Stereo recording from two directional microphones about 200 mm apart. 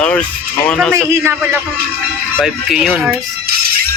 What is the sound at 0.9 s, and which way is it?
A man's voice, 10° right (ahead or behind).